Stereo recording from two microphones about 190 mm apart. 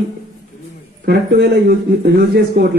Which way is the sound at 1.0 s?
60° right (ahead or behind).